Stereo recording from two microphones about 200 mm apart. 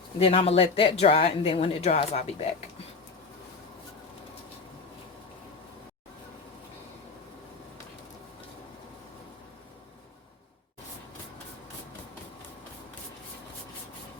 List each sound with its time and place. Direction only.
0.2 s speech: 30° left (ahead or behind)